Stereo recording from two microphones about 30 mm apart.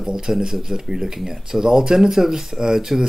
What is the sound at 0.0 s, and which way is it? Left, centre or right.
Speech, right.